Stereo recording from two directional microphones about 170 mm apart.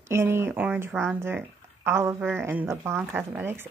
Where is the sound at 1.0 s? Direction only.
15° right (ahead or behind).